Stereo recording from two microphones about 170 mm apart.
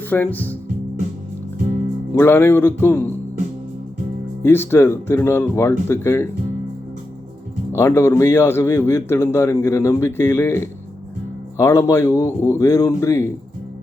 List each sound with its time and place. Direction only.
0.1 s speech: 10° left (ahead or behind)
2.1 s speech: 15° left (ahead or behind)
4.4 s speech: 15° left (ahead or behind)
7.7 s speech: 15° left (ahead or behind)